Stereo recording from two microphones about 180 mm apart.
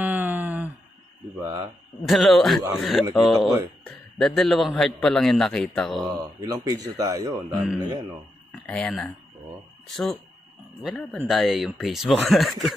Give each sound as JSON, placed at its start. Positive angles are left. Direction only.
{"t": 0.0, "sound": "a sound", "side_deg": -10}
{"t": 2.0, "sound": "a man's voice", "side_deg": 0}
{"t": 6.1, "sound": "speech", "side_deg": -20}
{"t": 8.5, "sound": "a man's voice", "side_deg": 5}